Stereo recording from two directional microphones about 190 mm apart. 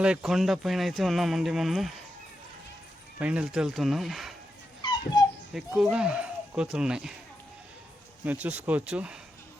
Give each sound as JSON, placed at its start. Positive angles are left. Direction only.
{"t": 0.0, "sound": "speech", "side_deg": -5}
{"t": 3.2, "sound": "speech", "side_deg": -5}
{"t": 4.8, "sound": "dog", "side_deg": 25}
{"t": 5.5, "sound": "speech", "side_deg": -5}
{"t": 8.2, "sound": "speech", "side_deg": -10}